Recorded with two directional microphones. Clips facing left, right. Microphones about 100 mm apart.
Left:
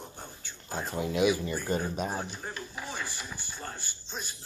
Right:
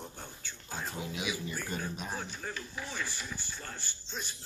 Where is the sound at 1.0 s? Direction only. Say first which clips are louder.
Left 13 dB; 55° left (ahead or behind).